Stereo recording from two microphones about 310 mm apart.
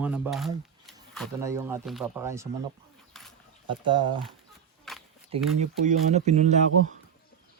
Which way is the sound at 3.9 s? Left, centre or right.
Centre.